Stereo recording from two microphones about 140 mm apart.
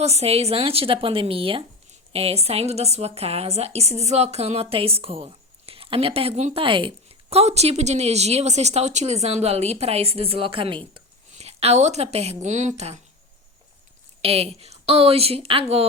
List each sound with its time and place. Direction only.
0.0 s a woman's voice: 50° right (ahead or behind)
11.3 s a woman's voice: 50° right (ahead or behind)
14.2 s a woman's voice: 45° right (ahead or behind)